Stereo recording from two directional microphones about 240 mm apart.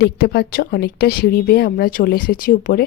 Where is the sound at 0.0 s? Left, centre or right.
Left.